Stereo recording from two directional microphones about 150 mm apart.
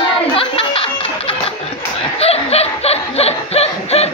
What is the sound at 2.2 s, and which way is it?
Snicker, 45° left (ahead or behind).